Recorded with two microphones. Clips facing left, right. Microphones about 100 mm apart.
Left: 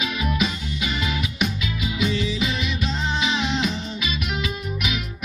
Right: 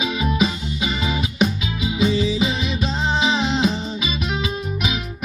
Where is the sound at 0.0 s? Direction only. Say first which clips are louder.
Right 4 dB; 25° right (ahead or behind).